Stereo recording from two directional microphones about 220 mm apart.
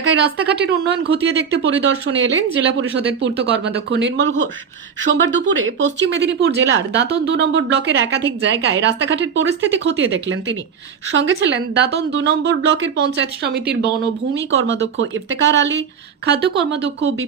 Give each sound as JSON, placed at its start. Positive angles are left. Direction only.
{"t": 0.0, "sound": "speech", "side_deg": -50}
{"t": 11.1, "sound": "speech", "side_deg": -55}
{"t": 14.6, "sound": "speech", "side_deg": -55}